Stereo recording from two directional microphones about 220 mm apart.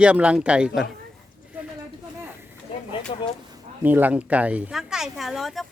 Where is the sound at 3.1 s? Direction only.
25° left (ahead or behind).